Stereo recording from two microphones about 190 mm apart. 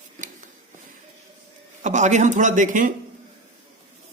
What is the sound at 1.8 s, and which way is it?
A man's voice, 40° right (ahead or behind).